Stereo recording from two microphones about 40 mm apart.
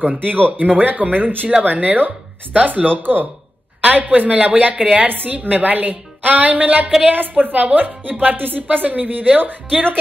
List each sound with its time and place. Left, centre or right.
0.2 s a woman's voice: right